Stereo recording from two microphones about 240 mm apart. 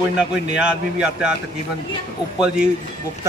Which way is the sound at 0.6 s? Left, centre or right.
Centre.